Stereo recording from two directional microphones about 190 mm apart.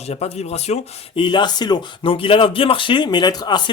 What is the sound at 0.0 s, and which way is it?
Speech, 35° left (ahead or behind).